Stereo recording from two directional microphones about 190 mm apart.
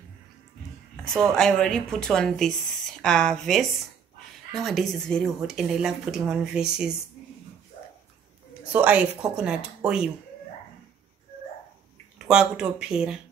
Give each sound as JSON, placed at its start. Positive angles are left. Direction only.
{"t": 1.0, "sound": "speech", "side_deg": 5}
{"t": 8.7, "sound": "a woman's voice", "side_deg": -5}
{"t": 12.3, "sound": "speech", "side_deg": -5}